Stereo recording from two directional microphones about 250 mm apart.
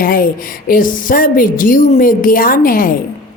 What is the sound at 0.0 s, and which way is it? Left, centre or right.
A woman's voice, left.